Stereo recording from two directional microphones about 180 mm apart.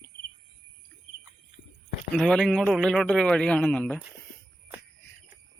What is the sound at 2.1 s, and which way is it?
A man's voice, 5° left (ahead or behind).